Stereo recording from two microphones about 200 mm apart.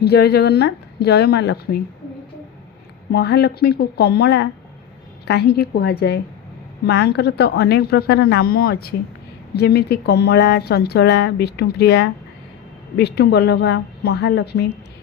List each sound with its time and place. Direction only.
0.0 s a woman's voice: 55° left (ahead or behind)
3.1 s a woman's voice: 55° left (ahead or behind)